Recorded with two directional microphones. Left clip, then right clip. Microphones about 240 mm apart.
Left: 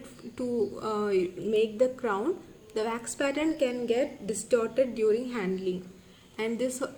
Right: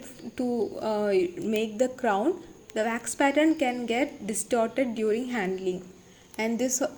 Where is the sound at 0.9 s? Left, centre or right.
Centre.